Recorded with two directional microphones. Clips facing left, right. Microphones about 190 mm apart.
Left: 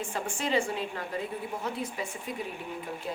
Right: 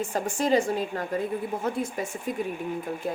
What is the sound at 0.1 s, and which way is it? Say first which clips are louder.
A woman's voice: right 6 dB; 40° right (ahead or behind).